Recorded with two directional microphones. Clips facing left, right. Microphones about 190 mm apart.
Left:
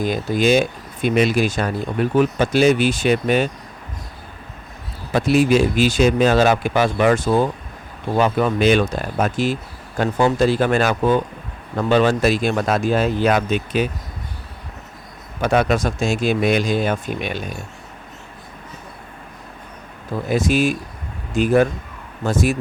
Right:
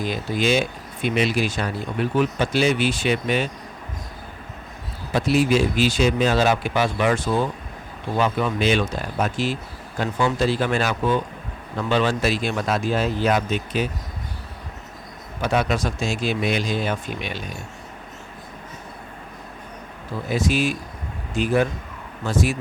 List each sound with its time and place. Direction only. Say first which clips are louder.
0.0 s speech: left 5 dB; 45° left (ahead or behind)
5.1 s speech: left 4 dB; 50° left (ahead or behind)
15.4 s speech: left 4 dB; 50° left (ahead or behind)
20.3 s speech: left 4 dB; 50° left (ahead or behind)